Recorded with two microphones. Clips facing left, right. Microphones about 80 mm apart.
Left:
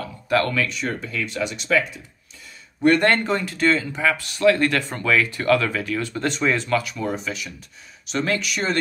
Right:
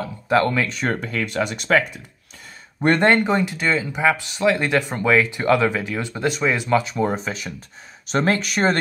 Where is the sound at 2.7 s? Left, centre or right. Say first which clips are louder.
Left 1 dB; right.